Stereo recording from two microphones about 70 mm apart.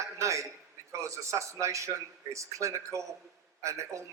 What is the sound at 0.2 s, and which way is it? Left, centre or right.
A man's voice, right.